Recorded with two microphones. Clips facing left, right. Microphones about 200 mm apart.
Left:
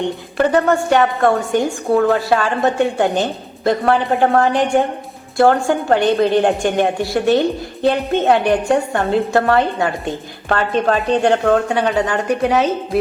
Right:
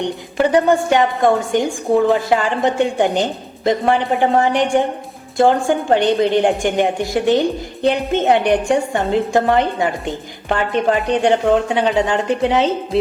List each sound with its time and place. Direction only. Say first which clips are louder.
0.0 s a woman's voice: even; 15° right (ahead or behind)